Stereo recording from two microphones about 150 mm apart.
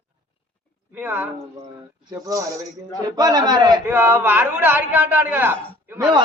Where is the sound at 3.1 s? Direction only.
25° right (ahead or behind).